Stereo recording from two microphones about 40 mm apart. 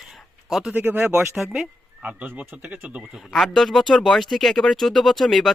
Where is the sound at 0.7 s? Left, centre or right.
Right.